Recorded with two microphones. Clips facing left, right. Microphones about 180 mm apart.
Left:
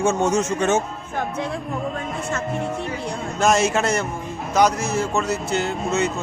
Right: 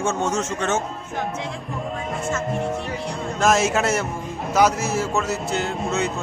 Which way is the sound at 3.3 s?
Centre (ahead or behind).